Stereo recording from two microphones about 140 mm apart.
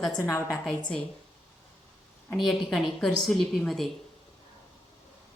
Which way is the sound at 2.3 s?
Centre (ahead or behind).